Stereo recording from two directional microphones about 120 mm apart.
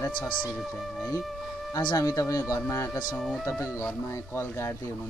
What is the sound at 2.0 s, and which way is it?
Speech, 25° left (ahead or behind).